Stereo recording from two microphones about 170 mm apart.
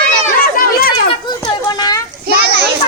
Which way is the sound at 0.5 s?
60° left (ahead or behind).